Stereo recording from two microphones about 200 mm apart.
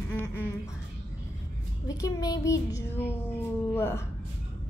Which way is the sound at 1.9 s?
15° left (ahead or behind).